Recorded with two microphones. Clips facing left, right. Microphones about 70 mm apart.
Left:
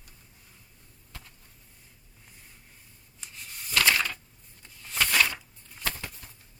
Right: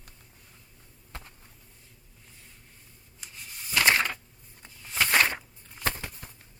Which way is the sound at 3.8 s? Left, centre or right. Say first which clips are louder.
Right 2 dB; right.